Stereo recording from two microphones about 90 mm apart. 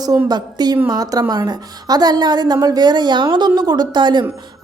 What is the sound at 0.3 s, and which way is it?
A woman's voice, 50° right (ahead or behind).